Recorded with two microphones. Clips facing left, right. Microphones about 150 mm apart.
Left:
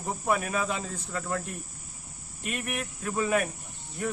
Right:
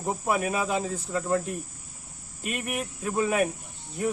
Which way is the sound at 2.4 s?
5° right (ahead or behind).